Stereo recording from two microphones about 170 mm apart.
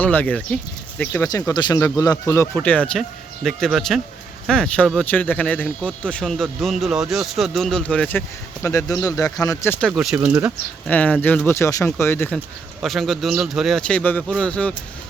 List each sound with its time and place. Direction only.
0.0 s speech: 10° left (ahead or behind)
1.1 s speech: 20° left (ahead or behind)
8.6 s speech: 20° left (ahead or behind)
9.8 s speech: centre (ahead or behind)
10.8 s speech: 10° left (ahead or behind)
12.8 s speech: centre (ahead or behind)